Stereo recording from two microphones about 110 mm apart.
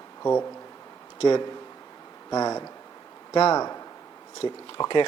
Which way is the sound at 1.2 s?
40° left (ahead or behind).